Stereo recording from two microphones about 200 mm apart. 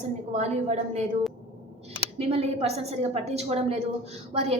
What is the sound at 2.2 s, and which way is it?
A woman's voice, 30° right (ahead or behind).